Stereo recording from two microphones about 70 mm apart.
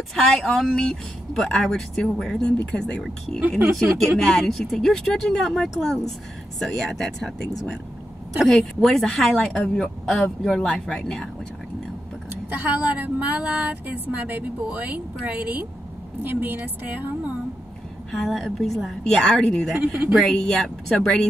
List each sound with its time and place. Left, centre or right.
0.1 s speech: centre
3.3 s speech: right
4.2 s a woman's voice: centre
8.5 s speech: centre
12.3 s speech: right
18.1 s a woman's voice: centre
19.8 s speech: right
20.2 s speech: centre